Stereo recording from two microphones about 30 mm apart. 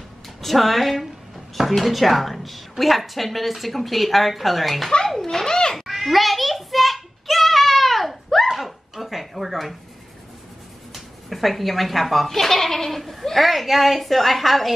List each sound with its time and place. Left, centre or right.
0.4 s speech: centre
5.2 s speech: centre
5.8 s a sound: centre
8.5 s dog: centre
11.2 s speech: centre